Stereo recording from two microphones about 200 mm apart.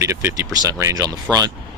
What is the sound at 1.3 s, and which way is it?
Speech, 5° left (ahead or behind).